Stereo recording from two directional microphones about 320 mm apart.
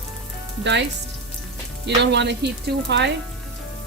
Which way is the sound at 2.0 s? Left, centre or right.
Right.